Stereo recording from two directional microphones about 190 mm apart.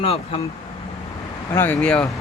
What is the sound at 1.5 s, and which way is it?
Speech, 10° left (ahead or behind).